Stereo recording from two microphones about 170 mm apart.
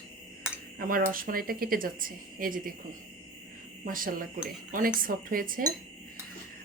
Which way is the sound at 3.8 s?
55° right (ahead or behind).